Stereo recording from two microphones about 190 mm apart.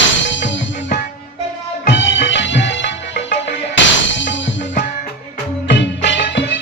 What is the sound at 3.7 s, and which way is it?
Music, 75° left (ahead or behind).